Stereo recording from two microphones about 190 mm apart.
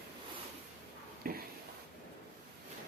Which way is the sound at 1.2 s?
50° right (ahead or behind).